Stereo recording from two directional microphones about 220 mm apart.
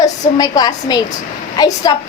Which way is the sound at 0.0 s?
15° left (ahead or behind).